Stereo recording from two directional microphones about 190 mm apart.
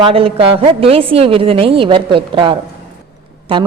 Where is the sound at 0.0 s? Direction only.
30° right (ahead or behind).